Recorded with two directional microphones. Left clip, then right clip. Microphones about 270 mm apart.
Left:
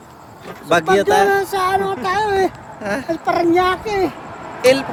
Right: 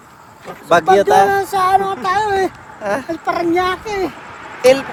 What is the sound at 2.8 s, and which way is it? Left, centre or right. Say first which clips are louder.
Speech: right 3 dB; centre.